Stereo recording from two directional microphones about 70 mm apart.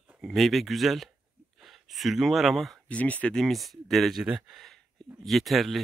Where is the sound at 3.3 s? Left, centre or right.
Centre.